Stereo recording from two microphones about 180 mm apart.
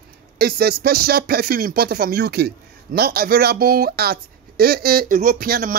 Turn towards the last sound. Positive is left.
turn(degrees=-55)  # may be behind; listen again after turning